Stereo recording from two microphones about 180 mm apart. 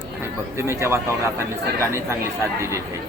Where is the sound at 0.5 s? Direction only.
15° right (ahead or behind).